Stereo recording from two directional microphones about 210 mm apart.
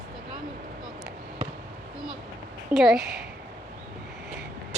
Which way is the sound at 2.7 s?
Centre (ahead or behind).